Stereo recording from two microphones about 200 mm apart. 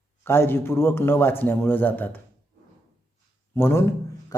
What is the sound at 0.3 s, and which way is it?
A man's voice, 10° left (ahead or behind).